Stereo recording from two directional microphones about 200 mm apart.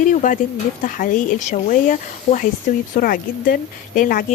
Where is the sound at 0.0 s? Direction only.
40° left (ahead or behind).